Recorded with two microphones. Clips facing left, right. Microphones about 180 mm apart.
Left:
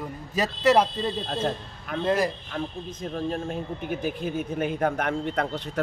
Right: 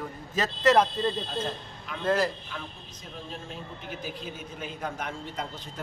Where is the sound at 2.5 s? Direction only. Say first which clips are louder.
Left 9 dB; 50° left (ahead or behind).